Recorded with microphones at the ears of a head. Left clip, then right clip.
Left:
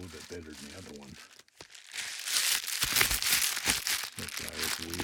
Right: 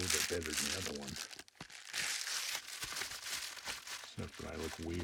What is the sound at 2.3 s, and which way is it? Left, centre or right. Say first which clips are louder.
Crumpling: left 10 dB; left.